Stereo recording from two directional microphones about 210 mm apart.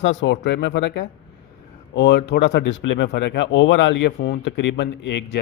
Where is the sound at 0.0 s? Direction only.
60° left (ahead or behind).